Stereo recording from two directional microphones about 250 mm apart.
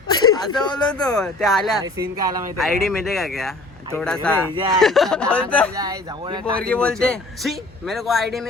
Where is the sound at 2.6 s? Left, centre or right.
Centre.